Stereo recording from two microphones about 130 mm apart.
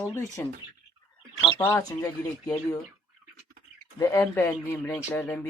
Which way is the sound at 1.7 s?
20° left (ahead or behind).